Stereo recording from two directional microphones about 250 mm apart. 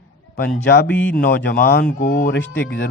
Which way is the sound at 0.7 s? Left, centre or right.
Left.